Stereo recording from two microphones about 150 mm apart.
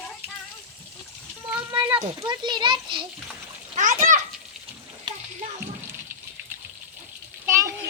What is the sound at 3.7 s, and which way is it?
Speech, 60° right (ahead or behind).